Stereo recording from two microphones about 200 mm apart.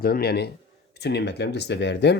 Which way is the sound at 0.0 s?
50° left (ahead or behind).